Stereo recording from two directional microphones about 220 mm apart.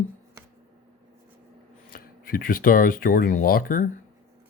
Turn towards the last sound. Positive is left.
turn(degrees=40)  # may be behind; listen again after turning